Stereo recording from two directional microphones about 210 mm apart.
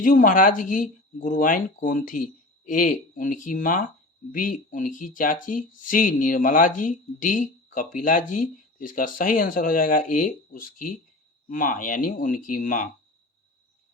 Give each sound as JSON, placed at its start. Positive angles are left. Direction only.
{"t": 0.0, "sound": "speech", "side_deg": 40}